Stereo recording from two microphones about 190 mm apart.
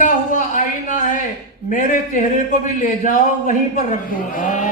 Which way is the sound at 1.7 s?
45° left (ahead or behind).